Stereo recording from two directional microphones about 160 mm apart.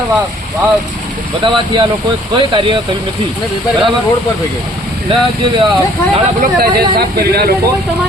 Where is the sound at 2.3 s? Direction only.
30° right (ahead or behind).